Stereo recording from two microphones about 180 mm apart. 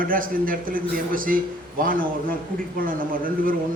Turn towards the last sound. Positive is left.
turn(degrees=-50)  # may be behind; listen again after turning